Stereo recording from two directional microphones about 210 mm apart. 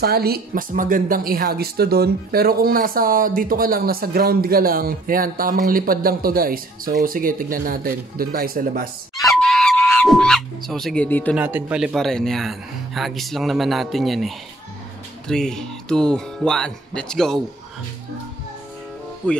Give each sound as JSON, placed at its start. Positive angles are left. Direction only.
{"t": 0.0, "sound": "a woman's voice", "side_deg": -45}
{"t": 9.2, "sound": "a sound", "side_deg": 0}
{"t": 11.3, "sound": "speech", "side_deg": -5}